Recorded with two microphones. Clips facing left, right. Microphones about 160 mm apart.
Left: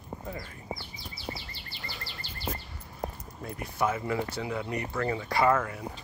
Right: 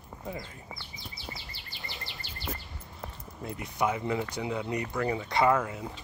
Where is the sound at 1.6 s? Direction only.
20° right (ahead or behind).